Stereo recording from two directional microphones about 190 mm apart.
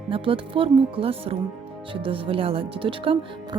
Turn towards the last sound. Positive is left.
turn(degrees=-25)  # may be behind; listen again after turning